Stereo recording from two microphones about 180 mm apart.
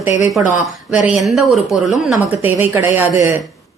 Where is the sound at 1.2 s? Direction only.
Centre (ahead or behind).